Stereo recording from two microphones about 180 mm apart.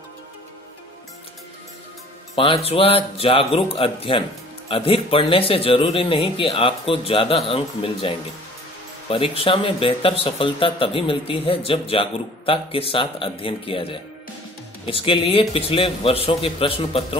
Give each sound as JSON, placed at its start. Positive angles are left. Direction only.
{"t": 2.3, "sound": "a man's voice", "side_deg": 30}